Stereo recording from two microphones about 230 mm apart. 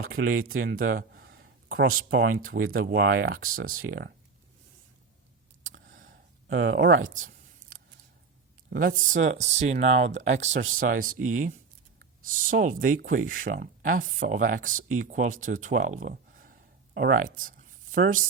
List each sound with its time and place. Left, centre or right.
0.3 s speech: right
3.8 s speech: right
5.7 s a sound: right
6.6 s speech: right
8.7 s speech: right